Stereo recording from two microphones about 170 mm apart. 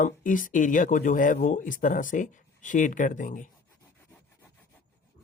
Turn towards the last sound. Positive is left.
turn(degrees=50)  # may be behind; listen again after turning